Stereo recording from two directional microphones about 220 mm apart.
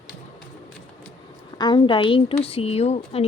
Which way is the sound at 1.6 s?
20° left (ahead or behind).